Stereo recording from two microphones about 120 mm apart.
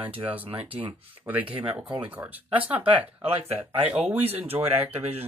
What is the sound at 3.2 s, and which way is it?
Speech, 55° right (ahead or behind).